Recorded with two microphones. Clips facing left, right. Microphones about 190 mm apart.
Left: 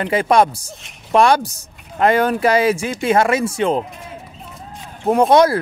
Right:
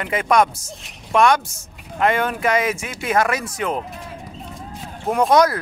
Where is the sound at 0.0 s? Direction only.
30° left (ahead or behind).